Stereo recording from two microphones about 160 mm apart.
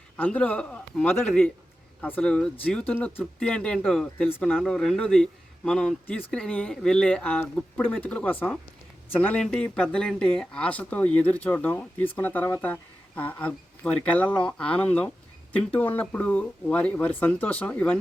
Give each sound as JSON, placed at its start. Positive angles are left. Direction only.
{"t": 0.2, "sound": "speech", "side_deg": 10}